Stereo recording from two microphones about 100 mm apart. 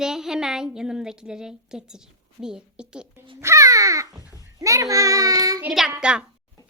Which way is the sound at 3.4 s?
30° right (ahead or behind).